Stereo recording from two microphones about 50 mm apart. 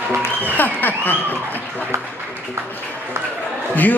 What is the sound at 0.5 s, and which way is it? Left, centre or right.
Speech, left.